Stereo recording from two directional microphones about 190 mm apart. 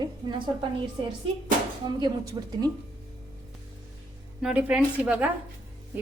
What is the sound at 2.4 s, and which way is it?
Speech, 20° right (ahead or behind).